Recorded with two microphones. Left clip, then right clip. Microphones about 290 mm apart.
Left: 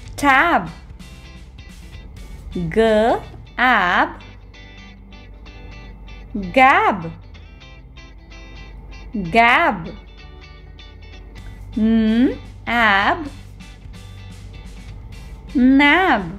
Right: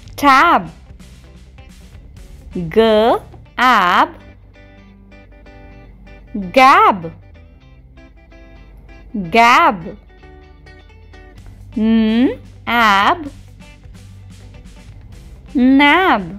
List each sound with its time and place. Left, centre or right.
0.1 s speech: centre
2.7 s speech: centre
4.7 s music: centre
6.5 s speech: right
8.5 s music: centre
9.3 s speech: right
11.8 s speech: centre
15.5 s speech: centre